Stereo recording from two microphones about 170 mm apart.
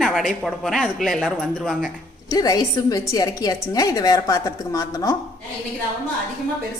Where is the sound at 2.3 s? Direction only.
20° left (ahead or behind).